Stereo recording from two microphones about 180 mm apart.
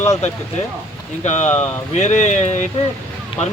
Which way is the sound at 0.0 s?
40° left (ahead or behind).